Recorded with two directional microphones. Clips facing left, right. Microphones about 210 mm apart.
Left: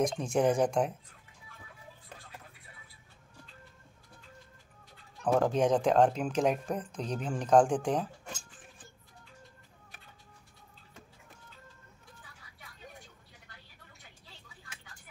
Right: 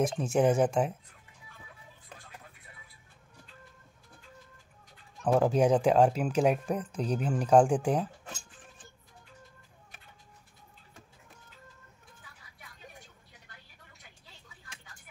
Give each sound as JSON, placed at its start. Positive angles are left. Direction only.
{"t": 0.0, "sound": "speech", "side_deg": -5}
{"t": 5.2, "sound": "speech", "side_deg": -5}